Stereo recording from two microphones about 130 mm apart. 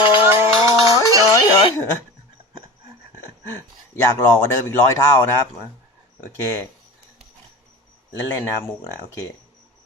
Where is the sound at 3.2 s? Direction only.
15° left (ahead or behind).